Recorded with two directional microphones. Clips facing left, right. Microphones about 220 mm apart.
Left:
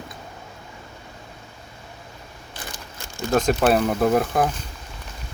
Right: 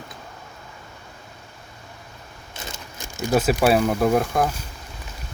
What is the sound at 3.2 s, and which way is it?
Speech, 5° right (ahead or behind).